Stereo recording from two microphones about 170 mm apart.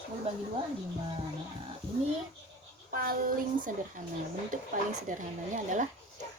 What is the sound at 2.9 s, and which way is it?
Speech, 55° right (ahead or behind).